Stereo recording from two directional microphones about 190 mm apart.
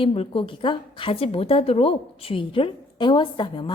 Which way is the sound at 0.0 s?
30° left (ahead or behind).